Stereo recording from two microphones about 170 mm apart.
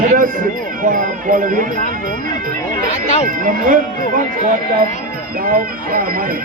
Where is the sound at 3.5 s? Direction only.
55° right (ahead or behind).